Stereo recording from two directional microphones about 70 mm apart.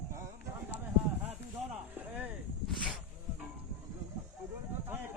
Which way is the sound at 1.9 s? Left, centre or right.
Right.